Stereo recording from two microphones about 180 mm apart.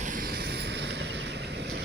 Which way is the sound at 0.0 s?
50° right (ahead or behind).